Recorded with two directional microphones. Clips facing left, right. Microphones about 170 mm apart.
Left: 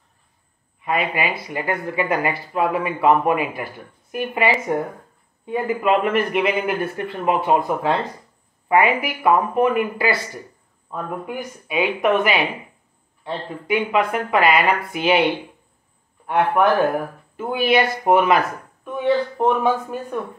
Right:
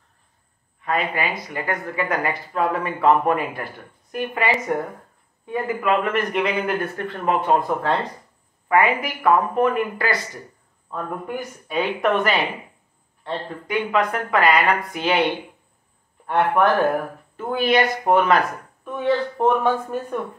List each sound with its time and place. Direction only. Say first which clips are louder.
0.7 s a woman's voice: left 1 dB; 10° left (ahead or behind)
1.7 s a man's voice: left 3 dB; 25° left (ahead or behind)
2.2 s a woman's voice: left 1 dB; 15° left (ahead or behind)
16.3 s a man's voice: left 1 dB; 5° left (ahead or behind)